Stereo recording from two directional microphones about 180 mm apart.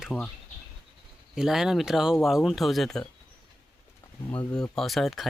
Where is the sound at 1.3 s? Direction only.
5° right (ahead or behind).